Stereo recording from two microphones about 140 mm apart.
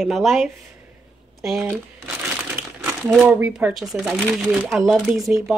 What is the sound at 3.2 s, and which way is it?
Speech, 15° right (ahead or behind).